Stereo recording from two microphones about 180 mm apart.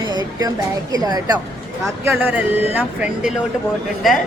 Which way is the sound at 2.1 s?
10° right (ahead or behind).